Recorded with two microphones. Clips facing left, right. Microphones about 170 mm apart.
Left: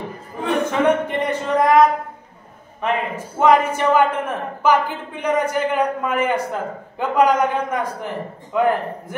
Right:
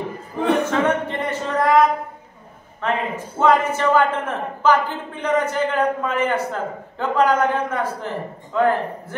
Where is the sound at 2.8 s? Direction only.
15° left (ahead or behind).